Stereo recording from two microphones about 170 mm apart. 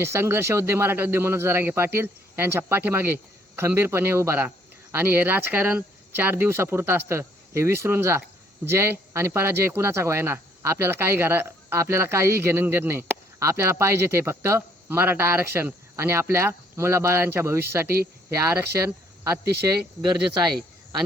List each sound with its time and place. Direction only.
0.0 s speech: 15° right (ahead or behind)
17.8 s speech: 65° right (ahead or behind)
18.4 s speech: 15° right (ahead or behind)